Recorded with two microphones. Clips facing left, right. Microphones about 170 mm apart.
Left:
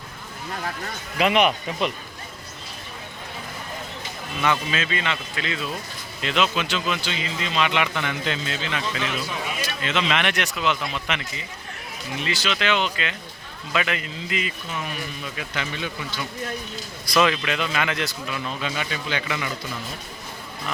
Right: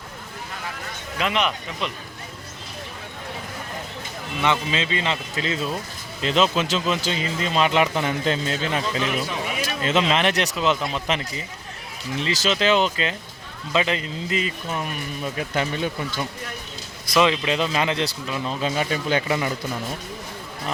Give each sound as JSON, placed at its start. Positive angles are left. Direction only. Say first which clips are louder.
{"t": 1.2, "sound": "speech", "louder": "left 4 dB", "side_deg": 10}
{"t": 4.4, "sound": "a man's voice", "louder": "right 1 dB", "side_deg": -25}
{"t": 17.1, "sound": "a man's voice", "louder": "right 2 dB", "side_deg": -25}